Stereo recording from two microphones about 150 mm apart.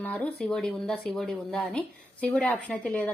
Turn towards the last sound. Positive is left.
turn(degrees=10)  # may be behind; listen again after turning